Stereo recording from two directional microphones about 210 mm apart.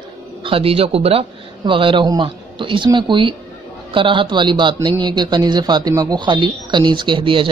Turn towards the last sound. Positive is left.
turn(degrees=-25)  # may be behind; listen again after turning